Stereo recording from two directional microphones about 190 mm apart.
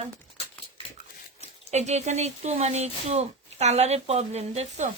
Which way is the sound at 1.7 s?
35° right (ahead or behind).